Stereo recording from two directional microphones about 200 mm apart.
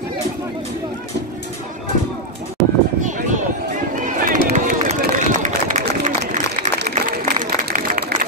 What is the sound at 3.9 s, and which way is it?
Run, 40° right (ahead or behind).